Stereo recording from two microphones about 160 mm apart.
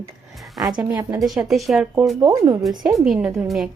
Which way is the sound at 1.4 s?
Centre (ahead or behind).